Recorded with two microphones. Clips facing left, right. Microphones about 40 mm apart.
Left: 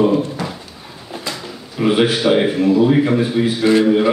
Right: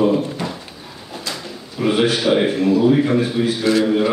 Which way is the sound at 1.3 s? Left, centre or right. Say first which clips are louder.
Left 3 dB; centre.